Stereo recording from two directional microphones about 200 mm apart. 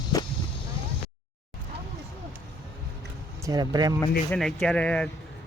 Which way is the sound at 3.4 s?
20° right (ahead or behind).